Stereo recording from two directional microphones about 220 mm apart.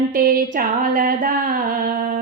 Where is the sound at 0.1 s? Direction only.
40° right (ahead or behind).